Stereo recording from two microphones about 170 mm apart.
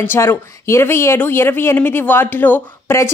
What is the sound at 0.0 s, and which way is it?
A woman's voice, 15° left (ahead or behind).